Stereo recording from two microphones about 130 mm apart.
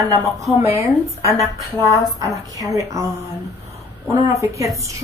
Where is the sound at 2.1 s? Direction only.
25° right (ahead or behind).